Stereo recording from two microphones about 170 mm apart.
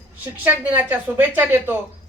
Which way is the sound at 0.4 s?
10° right (ahead or behind).